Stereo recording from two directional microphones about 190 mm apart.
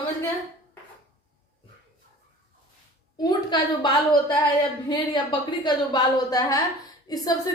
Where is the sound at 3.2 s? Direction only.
25° left (ahead or behind).